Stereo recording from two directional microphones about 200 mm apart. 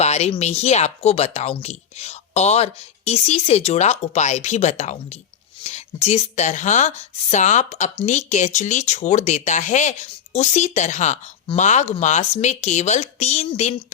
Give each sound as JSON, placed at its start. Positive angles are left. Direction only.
{"t": 0.0, "sound": "speech", "side_deg": 35}